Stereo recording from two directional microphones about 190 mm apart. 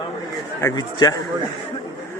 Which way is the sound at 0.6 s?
20° left (ahead or behind).